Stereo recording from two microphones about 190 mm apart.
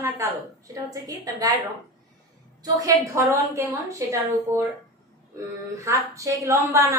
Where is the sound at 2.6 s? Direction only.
15° right (ahead or behind).